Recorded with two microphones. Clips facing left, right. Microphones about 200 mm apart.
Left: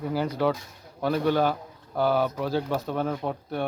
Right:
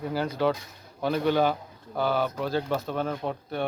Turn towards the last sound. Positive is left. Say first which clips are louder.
# left 1 dB
turn(degrees=5)  # may be behind; listen again after turning